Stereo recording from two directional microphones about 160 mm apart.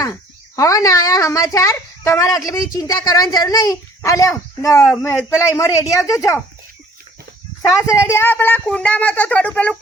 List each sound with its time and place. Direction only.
0.0 s speech: 20° left (ahead or behind)
7.8 s speech: 20° left (ahead or behind)